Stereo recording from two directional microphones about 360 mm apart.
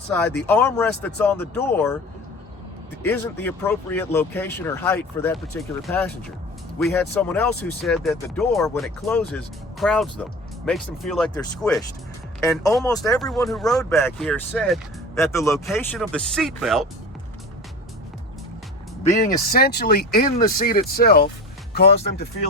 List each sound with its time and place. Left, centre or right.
0.4 s speech: centre
3.0 s speech: centre
19.0 s speech: left